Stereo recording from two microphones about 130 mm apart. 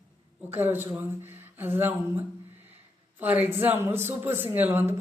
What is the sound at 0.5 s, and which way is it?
Speech, 15° right (ahead or behind).